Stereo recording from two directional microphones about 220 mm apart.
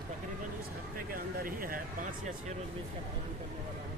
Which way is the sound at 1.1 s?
40° right (ahead or behind).